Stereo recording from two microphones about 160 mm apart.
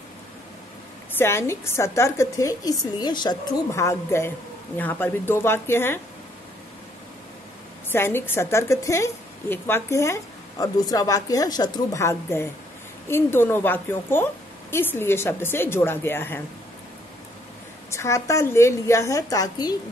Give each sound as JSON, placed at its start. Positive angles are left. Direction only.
{"t": 1.1, "sound": "a woman's voice", "side_deg": 15}
{"t": 7.9, "sound": "a woman's voice", "side_deg": 15}
{"t": 17.9, "sound": "a woman's voice", "side_deg": 20}